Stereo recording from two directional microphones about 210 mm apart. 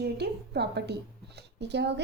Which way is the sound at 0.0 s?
50° right (ahead or behind).